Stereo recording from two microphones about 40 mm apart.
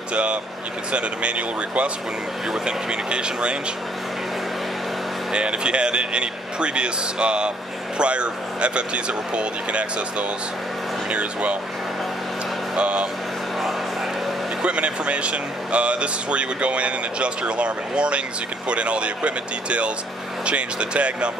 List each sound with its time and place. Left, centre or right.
0.1 s speech: right
5.3 s speech: right
12.7 s speech: right
14.6 s speech: right